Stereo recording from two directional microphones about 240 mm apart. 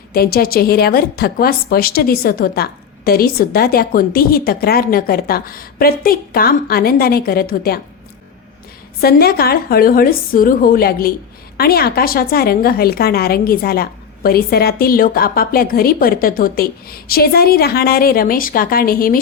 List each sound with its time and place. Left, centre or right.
0.1 s a woman's voice: left
9.0 s a woman's voice: left